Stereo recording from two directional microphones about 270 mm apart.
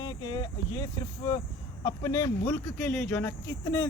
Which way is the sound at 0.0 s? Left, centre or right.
Centre.